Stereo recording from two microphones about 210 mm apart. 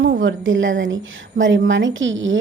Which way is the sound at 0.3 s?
65° right (ahead or behind).